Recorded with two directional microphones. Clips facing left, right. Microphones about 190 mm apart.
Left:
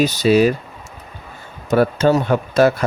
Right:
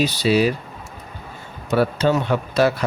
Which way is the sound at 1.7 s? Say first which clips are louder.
Left 4 dB; 45° left (ahead or behind).